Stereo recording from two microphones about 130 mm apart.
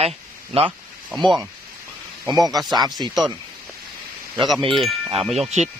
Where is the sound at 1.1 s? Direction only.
Centre (ahead or behind).